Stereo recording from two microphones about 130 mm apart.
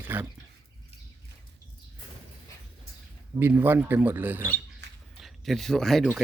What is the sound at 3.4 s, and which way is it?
Speech, 15° right (ahead or behind).